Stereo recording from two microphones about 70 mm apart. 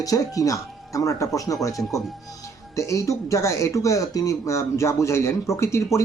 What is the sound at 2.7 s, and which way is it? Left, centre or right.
Speech, left.